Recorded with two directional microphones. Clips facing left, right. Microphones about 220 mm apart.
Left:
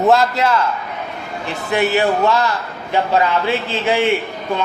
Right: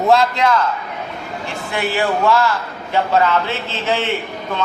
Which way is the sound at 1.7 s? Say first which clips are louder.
Left 4 dB; 20° left (ahead or behind).